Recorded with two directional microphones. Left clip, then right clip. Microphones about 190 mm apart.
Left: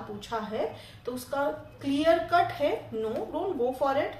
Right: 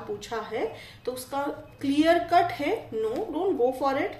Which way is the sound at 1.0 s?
40° right (ahead or behind).